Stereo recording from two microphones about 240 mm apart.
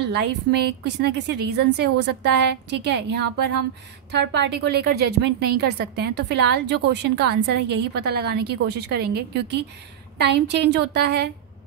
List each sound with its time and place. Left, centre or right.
0.0 s a woman's voice: right